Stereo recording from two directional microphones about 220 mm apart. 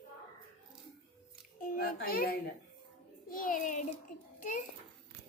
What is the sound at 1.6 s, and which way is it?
A child's voice, 40° left (ahead or behind).